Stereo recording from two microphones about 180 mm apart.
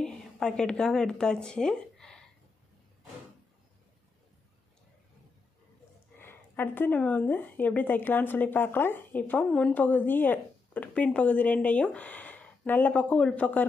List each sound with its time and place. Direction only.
0.0 s a woman's voice: 5° left (ahead or behind)
6.1 s speech: 10° left (ahead or behind)